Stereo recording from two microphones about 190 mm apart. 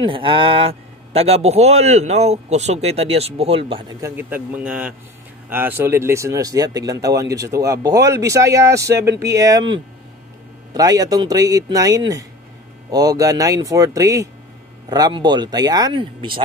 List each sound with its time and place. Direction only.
0.0 s speech: 25° right (ahead or behind)
4.0 s speech: 10° right (ahead or behind); by 16.4 s 25° right (ahead or behind)